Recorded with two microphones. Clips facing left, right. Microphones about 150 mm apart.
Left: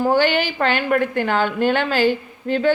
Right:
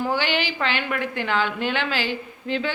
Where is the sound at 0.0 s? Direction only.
50° left (ahead or behind).